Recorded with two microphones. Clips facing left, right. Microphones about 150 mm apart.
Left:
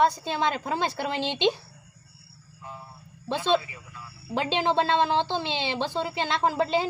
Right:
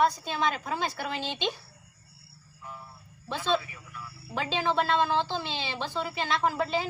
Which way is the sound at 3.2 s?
30° left (ahead or behind).